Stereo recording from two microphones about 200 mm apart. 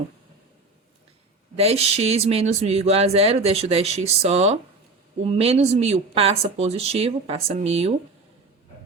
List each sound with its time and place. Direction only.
1.5 s speech: 30° right (ahead or behind)